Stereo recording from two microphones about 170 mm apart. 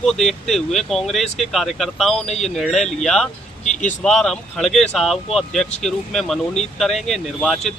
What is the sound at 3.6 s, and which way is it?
Speech, 45° left (ahead or behind).